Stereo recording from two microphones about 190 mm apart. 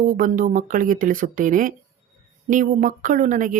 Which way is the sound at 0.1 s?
45° right (ahead or behind).